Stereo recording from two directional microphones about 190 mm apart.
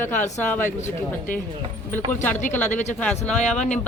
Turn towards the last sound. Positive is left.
turn(degrees=5)  # may be behind; listen again after turning